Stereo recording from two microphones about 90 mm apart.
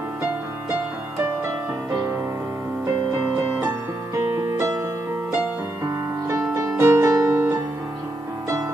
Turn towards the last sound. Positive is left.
turn(degrees=-35)  # may be behind; listen again after turning